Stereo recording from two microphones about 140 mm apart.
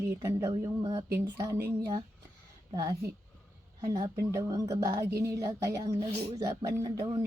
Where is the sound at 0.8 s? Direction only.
35° right (ahead or behind).